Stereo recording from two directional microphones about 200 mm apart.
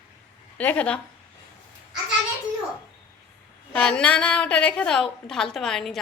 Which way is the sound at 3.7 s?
5° left (ahead or behind).